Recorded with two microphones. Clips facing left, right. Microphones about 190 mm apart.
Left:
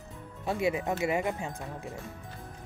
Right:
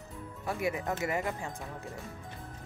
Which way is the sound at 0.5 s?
20° left (ahead or behind).